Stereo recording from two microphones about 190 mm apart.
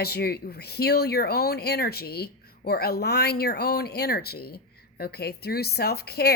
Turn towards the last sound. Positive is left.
turn(degrees=55)  # may be behind; listen again after turning